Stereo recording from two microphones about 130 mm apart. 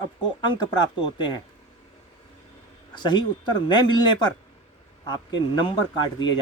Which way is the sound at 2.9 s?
35° left (ahead or behind).